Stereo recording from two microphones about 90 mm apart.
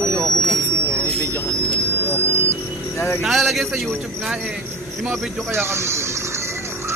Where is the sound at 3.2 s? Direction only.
Centre (ahead or behind).